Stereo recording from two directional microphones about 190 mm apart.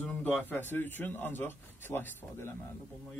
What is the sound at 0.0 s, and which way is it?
A man's voice, 10° left (ahead or behind).